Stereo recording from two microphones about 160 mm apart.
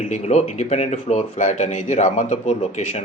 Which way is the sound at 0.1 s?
45° left (ahead or behind).